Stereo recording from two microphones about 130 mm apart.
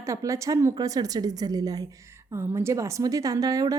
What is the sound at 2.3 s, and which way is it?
A woman's voice, 20° right (ahead or behind).